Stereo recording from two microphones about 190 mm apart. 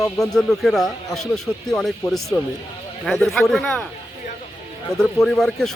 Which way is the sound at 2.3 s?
15° left (ahead or behind).